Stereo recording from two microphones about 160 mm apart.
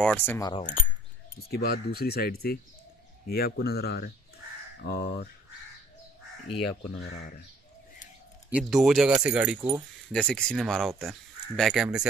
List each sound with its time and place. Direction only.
0.0 s cutlery: 10° left (ahead or behind)
0.4 s speech: 25° left (ahead or behind)
1.5 s speech: 75° left (ahead or behind)
8.5 s speech: 5° right (ahead or behind)
10.1 s speech: 5° left (ahead or behind)